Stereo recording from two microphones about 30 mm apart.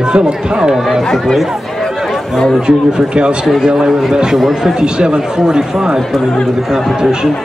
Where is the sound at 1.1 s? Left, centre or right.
Centre.